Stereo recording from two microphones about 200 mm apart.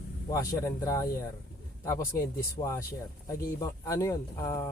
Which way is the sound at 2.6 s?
15° left (ahead or behind).